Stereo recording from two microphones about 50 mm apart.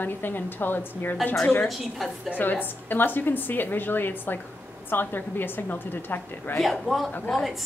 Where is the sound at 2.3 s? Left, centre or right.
Left.